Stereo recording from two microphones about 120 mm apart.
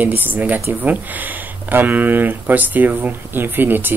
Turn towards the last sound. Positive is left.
turn(degrees=-15)  # may be behind; listen again after turning